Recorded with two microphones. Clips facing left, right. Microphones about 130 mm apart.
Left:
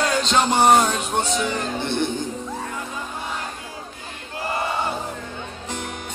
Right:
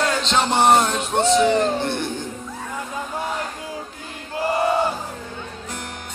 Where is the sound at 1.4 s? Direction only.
35° right (ahead or behind).